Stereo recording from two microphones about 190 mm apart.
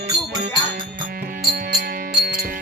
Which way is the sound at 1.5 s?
50° right (ahead or behind).